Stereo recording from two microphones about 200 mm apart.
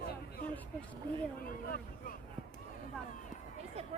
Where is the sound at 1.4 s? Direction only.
45° left (ahead or behind).